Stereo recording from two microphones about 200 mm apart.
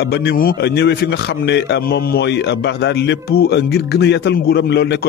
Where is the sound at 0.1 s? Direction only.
50° left (ahead or behind).